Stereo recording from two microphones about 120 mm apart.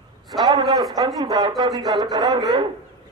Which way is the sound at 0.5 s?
30° right (ahead or behind).